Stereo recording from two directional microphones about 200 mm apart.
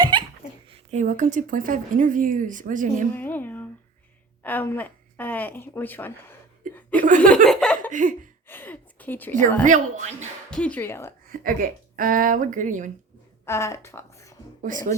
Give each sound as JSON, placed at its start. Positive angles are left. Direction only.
{"t": 0.0, "sound": "a sound", "side_deg": -25}
{"t": 0.7, "sound": "speech", "side_deg": -35}
{"t": 3.2, "sound": "a woman's voice", "side_deg": 10}
{"t": 7.9, "sound": "speech", "side_deg": -40}
{"t": 8.4, "sound": "a sound", "side_deg": 10}
{"t": 9.6, "sound": "speech", "side_deg": -40}
{"t": 10.5, "sound": "a woman's voice", "side_deg": 5}
{"t": 11.3, "sound": "speech", "side_deg": -45}
{"t": 13.4, "sound": "a woman's voice", "side_deg": 15}
{"t": 14.6, "sound": "speech", "side_deg": -40}